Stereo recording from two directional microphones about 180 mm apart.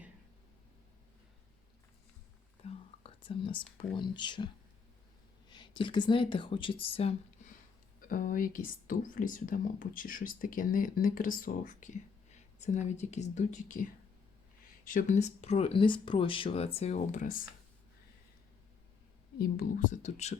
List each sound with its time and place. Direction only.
2.6 s whispering: 30° left (ahead or behind)
3.9 s speech: 25° left (ahead or behind)
5.5 s speech: 25° left (ahead or behind)
8.0 s speech: 50° left (ahead or behind)
19.4 s speech: 50° left (ahead or behind)